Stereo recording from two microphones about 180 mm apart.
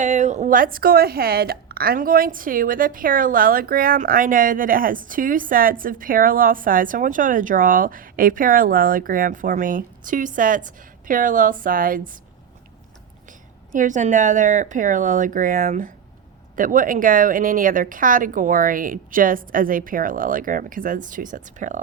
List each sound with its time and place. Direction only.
0.0 s a woman's voice: 40° right (ahead or behind)
13.7 s a woman's voice: 45° right (ahead or behind)